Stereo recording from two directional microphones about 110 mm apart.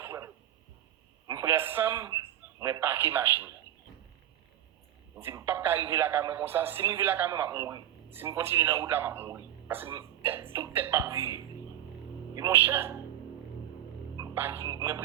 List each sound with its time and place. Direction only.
0.0 s radio: 30° right (ahead or behind)
1.3 s a man's voice: 25° right (ahead or behind)
2.0 s speech: 35° right (ahead or behind)
5.3 s a woman's voice: 25° right (ahead or behind)
12.5 s a woman's voice: 20° right (ahead or behind)
14.3 s a woman's voice: 20° right (ahead or behind)